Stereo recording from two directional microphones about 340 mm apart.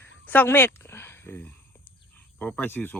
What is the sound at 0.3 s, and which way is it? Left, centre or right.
Speech, centre.